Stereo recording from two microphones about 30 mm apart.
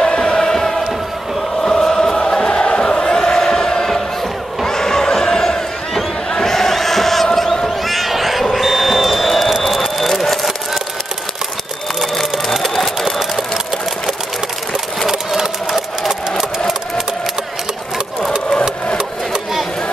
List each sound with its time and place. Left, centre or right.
0.0 s music: left
1.6 s chant: centre
3.3 s crowd: centre
7.8 s a sound: centre
12.6 s sewing machine: centre
18.5 s engine: left